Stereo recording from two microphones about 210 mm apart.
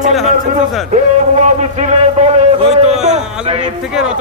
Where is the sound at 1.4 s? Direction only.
30° right (ahead or behind).